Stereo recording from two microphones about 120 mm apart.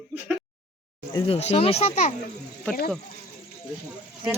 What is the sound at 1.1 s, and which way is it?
Speech, 45° left (ahead or behind).